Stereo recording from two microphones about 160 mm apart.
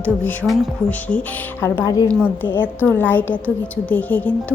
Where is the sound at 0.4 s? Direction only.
Centre (ahead or behind).